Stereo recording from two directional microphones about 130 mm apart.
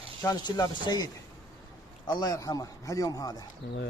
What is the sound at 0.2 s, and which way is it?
Speech, 30° left (ahead or behind).